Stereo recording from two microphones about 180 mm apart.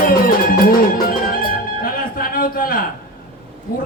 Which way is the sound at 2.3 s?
55° left (ahead or behind).